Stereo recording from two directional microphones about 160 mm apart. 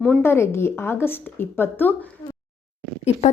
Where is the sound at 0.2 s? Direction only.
15° left (ahead or behind).